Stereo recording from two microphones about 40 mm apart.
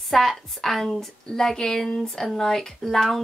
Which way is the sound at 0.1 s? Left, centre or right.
Centre.